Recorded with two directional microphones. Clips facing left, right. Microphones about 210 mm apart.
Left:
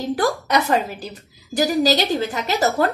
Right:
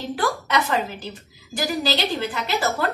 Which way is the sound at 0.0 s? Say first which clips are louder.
Left 4 dB; 40° left (ahead or behind).